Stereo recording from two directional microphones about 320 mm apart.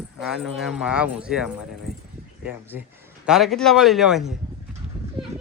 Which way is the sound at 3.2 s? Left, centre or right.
Centre.